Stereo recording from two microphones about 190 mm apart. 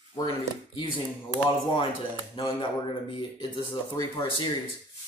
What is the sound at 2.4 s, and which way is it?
Speech, 25° left (ahead or behind).